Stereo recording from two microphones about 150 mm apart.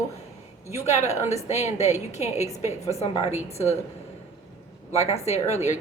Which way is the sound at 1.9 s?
20° right (ahead or behind).